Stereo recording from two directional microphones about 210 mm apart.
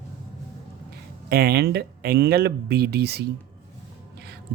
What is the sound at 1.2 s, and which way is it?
A man's voice, 45° right (ahead or behind).